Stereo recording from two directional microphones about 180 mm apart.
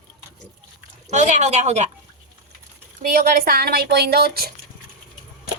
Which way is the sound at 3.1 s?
55° right (ahead or behind).